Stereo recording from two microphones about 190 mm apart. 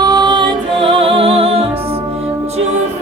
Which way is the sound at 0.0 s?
25° right (ahead or behind).